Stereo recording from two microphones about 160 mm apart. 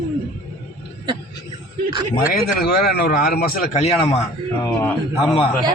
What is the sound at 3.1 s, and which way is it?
Speech, 70° left (ahead or behind).